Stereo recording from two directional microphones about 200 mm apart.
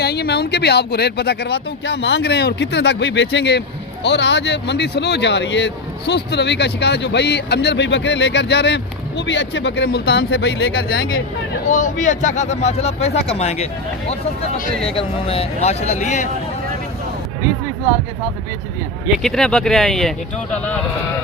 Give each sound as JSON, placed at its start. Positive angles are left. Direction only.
{"t": 0.0, "sound": "speech", "side_deg": 55}
{"t": 11.7, "sound": "speech", "side_deg": 35}
{"t": 14.8, "sound": "speech", "side_deg": 30}
{"t": 19.0, "sound": "speech", "side_deg": 0}